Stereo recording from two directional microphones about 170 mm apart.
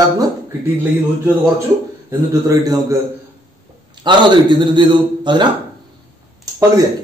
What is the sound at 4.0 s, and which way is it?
Speech, 25° right (ahead or behind).